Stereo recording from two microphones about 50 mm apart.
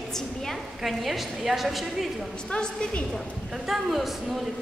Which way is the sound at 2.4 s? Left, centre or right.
Left.